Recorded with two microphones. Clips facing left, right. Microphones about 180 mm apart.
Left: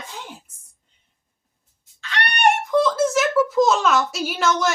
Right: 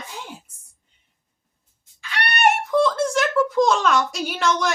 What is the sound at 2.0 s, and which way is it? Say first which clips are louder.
A child's voice: left 1 dB; 10° right (ahead or behind).